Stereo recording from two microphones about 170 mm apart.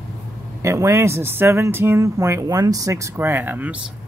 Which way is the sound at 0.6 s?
15° right (ahead or behind).